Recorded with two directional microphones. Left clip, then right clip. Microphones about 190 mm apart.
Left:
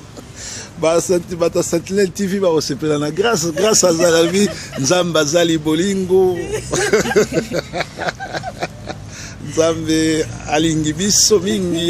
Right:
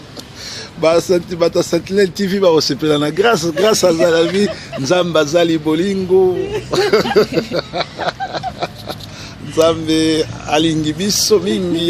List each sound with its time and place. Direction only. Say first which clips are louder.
0.8 s speech: right 2 dB; centre (ahead or behind)
7.3 s a sound: right 2 dB; 10° left (ahead or behind)
9.6 s speech: right 2 dB; 10° left (ahead or behind)